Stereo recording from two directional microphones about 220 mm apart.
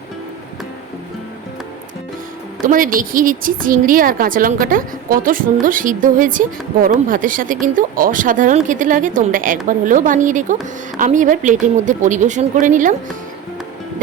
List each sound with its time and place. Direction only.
2.6 s a woman's voice: 40° right (ahead or behind)